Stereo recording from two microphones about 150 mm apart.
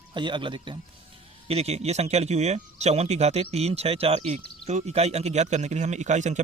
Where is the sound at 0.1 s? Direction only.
30° right (ahead or behind).